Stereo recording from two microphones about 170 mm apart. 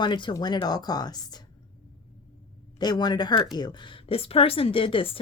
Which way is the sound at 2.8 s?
25° left (ahead or behind).